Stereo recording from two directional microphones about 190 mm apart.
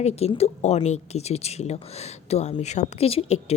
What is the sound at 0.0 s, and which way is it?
Speech, 35° left (ahead or behind).